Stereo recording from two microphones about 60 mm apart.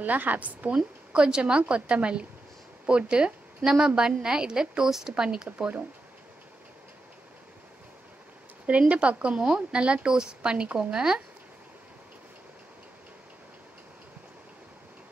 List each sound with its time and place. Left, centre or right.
0.0 s a woman's voice: right
0.7 s a woman's voice: centre
8.6 s a woman's voice: right